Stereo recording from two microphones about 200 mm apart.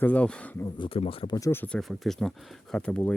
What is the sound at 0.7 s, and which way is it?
Speech, 30° left (ahead or behind).